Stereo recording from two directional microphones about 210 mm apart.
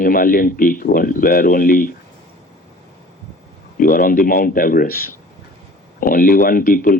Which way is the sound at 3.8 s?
40° left (ahead or behind).